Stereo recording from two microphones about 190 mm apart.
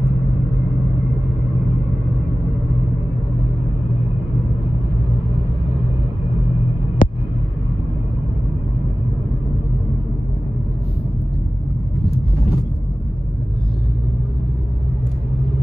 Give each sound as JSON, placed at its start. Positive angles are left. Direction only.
{"t": 7.0, "sound": "heart sounds", "side_deg": 45}